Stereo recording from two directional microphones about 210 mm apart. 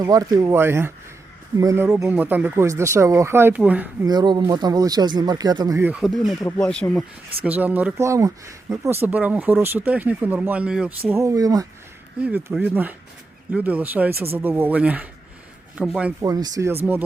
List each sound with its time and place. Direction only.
0.0 s speech: 15° right (ahead or behind)
4.0 s speech: 20° right (ahead or behind); by 7.0 s 5° left (ahead or behind)
7.4 s speech: 10° right (ahead or behind)
16.2 s speech: 15° right (ahead or behind)